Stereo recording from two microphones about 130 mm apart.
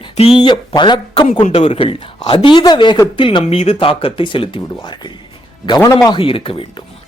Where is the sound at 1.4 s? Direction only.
50° left (ahead or behind).